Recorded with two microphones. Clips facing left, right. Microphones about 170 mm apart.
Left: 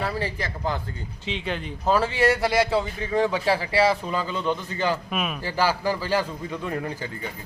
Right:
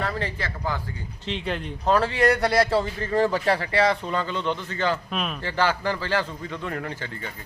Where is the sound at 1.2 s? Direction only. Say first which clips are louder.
Right 1 dB; centre (ahead or behind).